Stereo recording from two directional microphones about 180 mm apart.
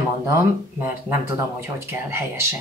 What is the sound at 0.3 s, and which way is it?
Speech, 10° right (ahead or behind).